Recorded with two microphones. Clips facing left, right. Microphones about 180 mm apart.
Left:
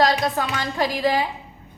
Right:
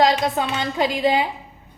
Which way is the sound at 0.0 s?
20° right (ahead or behind).